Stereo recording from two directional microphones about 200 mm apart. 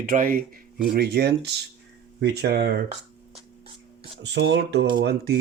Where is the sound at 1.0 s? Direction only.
55° right (ahead or behind).